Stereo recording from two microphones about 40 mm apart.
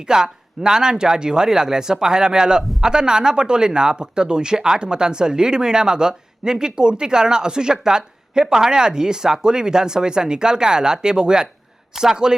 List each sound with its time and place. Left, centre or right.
0.1 s speech: centre